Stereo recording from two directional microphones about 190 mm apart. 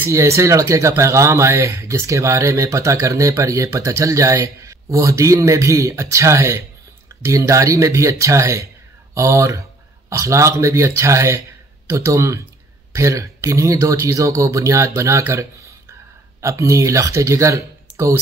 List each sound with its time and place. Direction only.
0.0 s speech: 15° right (ahead or behind)